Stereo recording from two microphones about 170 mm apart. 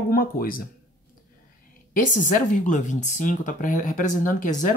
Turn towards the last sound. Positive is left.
turn(degrees=50)  # may be behind; listen again after turning